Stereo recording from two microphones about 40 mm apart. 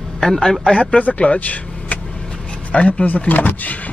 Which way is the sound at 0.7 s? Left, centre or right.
Left.